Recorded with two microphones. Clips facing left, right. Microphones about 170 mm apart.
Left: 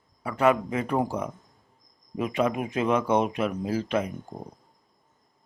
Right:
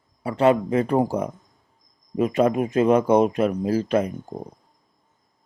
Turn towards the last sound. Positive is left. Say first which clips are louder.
# right 5 dB
turn(degrees=-40)  # may be behind; listen again after turning